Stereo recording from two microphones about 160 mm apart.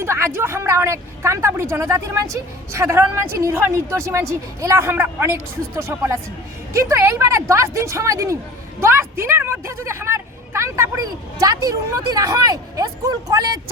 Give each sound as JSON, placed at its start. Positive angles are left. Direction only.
{"t": 0.0, "sound": "a woman's voice", "side_deg": -15}